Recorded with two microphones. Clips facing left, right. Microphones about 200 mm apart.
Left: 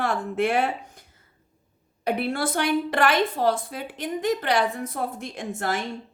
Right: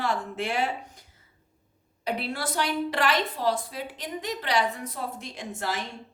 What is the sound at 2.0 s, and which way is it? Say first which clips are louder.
A woman's voice: left 5 dB; 55° left (ahead or behind).